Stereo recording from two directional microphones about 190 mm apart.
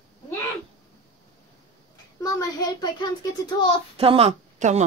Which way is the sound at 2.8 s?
20° left (ahead or behind).